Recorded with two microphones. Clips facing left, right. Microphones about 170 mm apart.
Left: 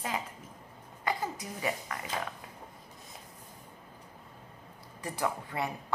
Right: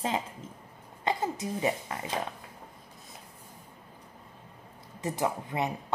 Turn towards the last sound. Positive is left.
turn(degrees=-20)  # may be behind; listen again after turning